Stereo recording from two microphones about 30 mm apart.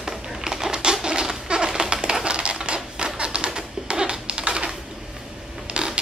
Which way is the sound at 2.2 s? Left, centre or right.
Right.